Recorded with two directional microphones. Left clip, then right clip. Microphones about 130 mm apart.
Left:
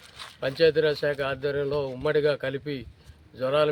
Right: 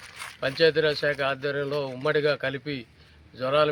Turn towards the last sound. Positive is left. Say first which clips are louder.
# right 1 dB
turn(degrees=35)  # may be behind; listen again after turning